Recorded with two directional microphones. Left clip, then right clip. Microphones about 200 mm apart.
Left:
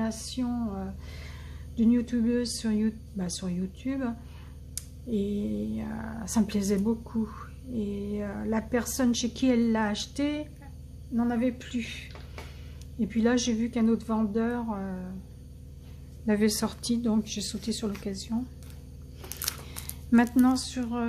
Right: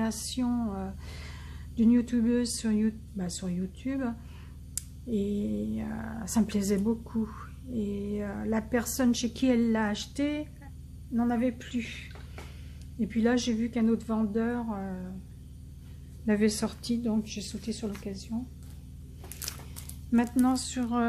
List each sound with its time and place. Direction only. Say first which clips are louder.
0.0 s music: right 1 dB; 15° right (ahead or behind)
1.8 s speech: even; 10° right (ahead or behind)
16.3 s a woman's voice: left 1 dB; centre (ahead or behind); by 18.4 s 15° left (ahead or behind)
19.7 s a sound: left 4 dB; 20° left (ahead or behind)
20.2 s speech: left 3 dB; 5° left (ahead or behind)